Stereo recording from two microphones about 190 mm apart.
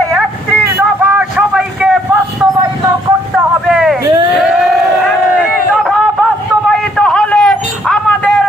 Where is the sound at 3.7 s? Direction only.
Centre (ahead or behind).